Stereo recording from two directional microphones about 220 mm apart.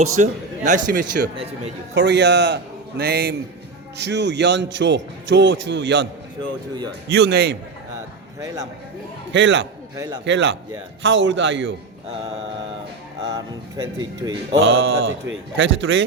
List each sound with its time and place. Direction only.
0.2 s a man's voice: 35° right (ahead or behind)
2.0 s a man's voice: 50° right (ahead or behind)
7.1 s a man's voice: 50° right (ahead or behind)
9.3 s speech: 55° right (ahead or behind)
13.2 s speech: 20° right (ahead or behind)
14.5 s speech: 55° right (ahead or behind)